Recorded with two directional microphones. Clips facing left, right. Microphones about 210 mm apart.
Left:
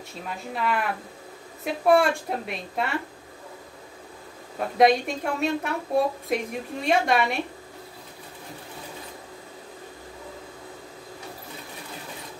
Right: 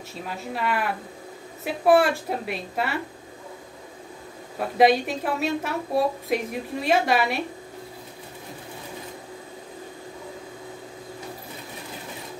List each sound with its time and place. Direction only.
0.3 s a woman's voice: centre (ahead or behind)
4.6 s a woman's voice: centre (ahead or behind)